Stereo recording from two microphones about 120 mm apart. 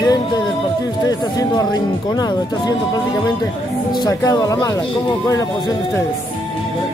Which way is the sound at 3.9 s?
35° left (ahead or behind).